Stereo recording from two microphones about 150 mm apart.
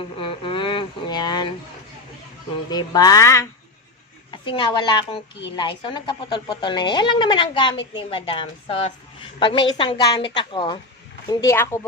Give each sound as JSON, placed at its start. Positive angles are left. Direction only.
{"t": 0.2, "sound": "speech", "side_deg": 35}
{"t": 2.6, "sound": "speech", "side_deg": 25}
{"t": 4.3, "sound": "a woman's voice", "side_deg": 35}
{"t": 11.3, "sound": "speech", "side_deg": 20}